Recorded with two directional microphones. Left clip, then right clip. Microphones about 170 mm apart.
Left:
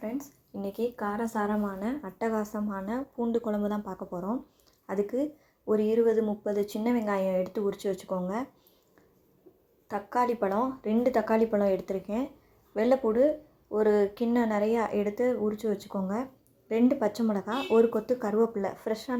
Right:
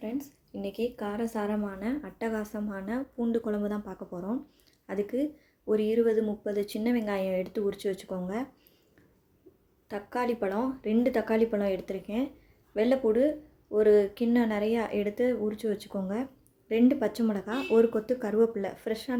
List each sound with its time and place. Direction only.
0.0 s a woman's voice: 5° right (ahead or behind)
9.9 s a woman's voice: centre (ahead or behind)